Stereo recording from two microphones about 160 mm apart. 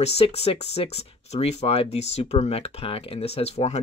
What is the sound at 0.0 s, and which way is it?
Speech, 40° left (ahead or behind).